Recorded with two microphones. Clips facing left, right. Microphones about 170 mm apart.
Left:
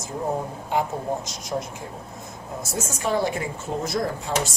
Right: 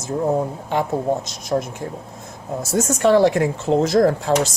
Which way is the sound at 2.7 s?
80° right.